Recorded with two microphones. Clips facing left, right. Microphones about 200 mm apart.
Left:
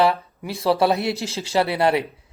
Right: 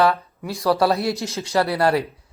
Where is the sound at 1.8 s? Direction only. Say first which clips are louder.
Even; 25° left (ahead or behind).